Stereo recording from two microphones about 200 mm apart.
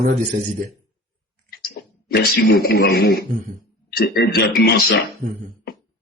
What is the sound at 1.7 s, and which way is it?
A man's voice, 55° left (ahead or behind).